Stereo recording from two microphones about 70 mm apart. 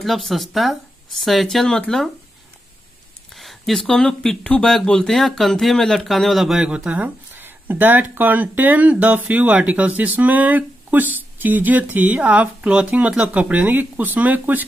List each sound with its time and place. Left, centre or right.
0.0 s speech: centre
3.3 s speech: centre
6.7 s speech: centre